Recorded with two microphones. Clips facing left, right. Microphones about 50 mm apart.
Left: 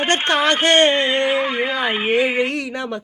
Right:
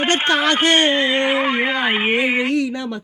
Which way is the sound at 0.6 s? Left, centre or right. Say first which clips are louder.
Left 1 dB; left.